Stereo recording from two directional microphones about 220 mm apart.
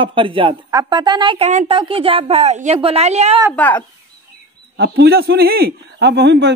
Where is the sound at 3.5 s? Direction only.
5° left (ahead or behind).